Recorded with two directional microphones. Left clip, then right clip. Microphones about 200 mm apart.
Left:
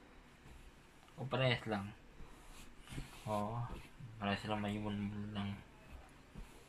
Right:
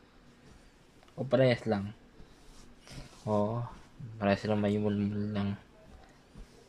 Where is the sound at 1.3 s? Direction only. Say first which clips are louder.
Right 10 dB; 65° right (ahead or behind).